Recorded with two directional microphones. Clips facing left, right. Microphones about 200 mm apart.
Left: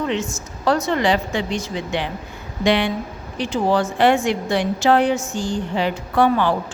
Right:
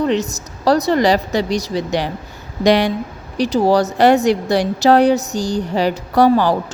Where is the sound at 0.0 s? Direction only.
35° right (ahead or behind).